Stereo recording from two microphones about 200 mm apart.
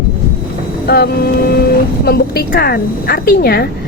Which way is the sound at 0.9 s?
55° left (ahead or behind).